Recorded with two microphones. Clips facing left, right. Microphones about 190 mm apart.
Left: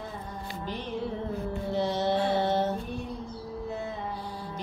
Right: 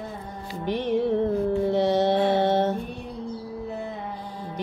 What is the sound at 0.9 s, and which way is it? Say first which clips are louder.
Music: right 12 dB; 60° right (ahead or behind).